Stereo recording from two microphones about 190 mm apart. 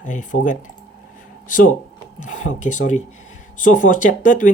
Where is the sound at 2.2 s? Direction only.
40° left (ahead or behind).